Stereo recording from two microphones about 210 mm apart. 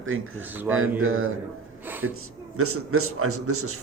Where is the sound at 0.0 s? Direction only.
70° right (ahead or behind).